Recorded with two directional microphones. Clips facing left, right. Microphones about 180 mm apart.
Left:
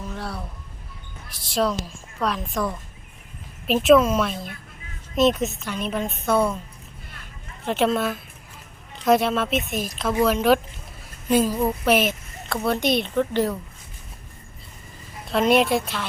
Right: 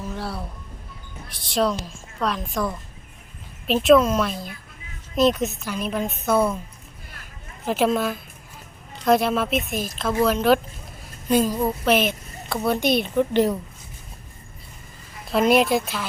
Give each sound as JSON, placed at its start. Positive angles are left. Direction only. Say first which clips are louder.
{"t": 0.0, "sound": "a sound", "louder": "right 2 dB", "side_deg": 0}
{"t": 1.3, "sound": "a woman's voice", "louder": "right 1 dB", "side_deg": 0}
{"t": 7.6, "sound": "a woman's voice", "louder": "right 1 dB", "side_deg": 0}
{"t": 13.1, "sound": "a woman's voice", "louder": "right 2 dB", "side_deg": -15}
{"t": 15.3, "sound": "a woman's voice", "louder": "right 1 dB", "side_deg": -5}